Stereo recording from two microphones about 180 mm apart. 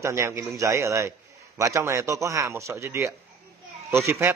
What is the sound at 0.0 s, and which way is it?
Speech, 15° right (ahead or behind).